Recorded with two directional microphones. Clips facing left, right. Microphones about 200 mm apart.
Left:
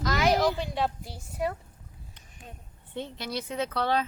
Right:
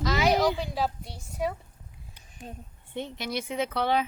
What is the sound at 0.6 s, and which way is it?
Speech, centre (ahead or behind).